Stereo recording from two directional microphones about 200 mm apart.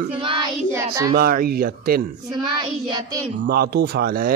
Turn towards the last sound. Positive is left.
turn(degrees=-50)  # may be behind; listen again after turning